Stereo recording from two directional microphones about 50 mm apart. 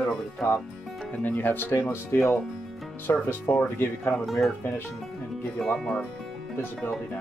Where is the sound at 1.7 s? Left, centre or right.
Left.